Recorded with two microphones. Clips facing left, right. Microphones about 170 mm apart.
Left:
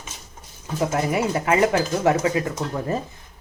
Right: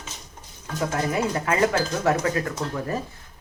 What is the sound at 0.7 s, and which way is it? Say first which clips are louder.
Speech: left 3 dB; 15° left (ahead or behind).